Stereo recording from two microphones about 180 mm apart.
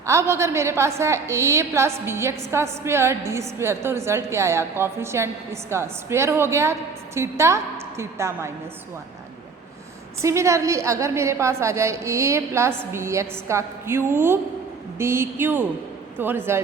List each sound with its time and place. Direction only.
0.0 s a woman's voice: 15° right (ahead or behind)
10.2 s a woman's voice: 15° right (ahead or behind)